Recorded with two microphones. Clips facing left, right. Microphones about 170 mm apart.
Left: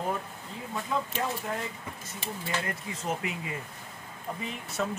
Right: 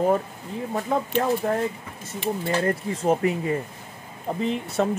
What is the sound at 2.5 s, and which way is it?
Speech, 35° right (ahead or behind).